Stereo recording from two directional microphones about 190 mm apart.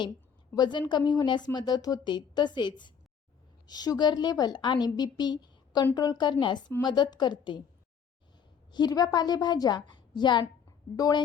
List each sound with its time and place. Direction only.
0.5 s a woman's voice: 25° left (ahead or behind)
8.7 s a woman's voice: 20° left (ahead or behind)
9.9 s a sound: 25° left (ahead or behind)
10.9 s a woman's voice: 20° left (ahead or behind)